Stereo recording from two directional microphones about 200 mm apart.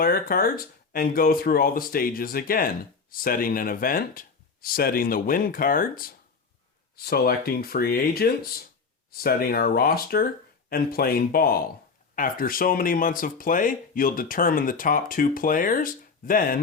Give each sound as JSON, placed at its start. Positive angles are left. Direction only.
{"t": 0.0, "sound": "speech", "side_deg": 45}